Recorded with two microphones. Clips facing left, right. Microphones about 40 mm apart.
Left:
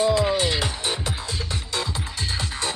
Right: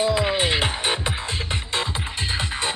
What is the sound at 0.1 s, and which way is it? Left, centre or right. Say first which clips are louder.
Music: even; right.